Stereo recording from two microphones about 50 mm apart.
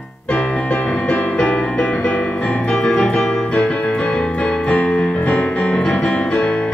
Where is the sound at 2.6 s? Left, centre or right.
Left.